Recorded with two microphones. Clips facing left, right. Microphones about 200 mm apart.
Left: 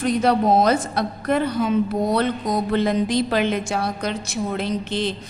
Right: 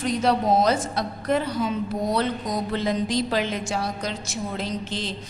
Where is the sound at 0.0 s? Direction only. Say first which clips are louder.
Left 4 dB; 55° left (ahead or behind).